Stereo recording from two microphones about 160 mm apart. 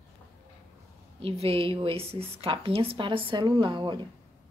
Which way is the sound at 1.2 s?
35° right (ahead or behind).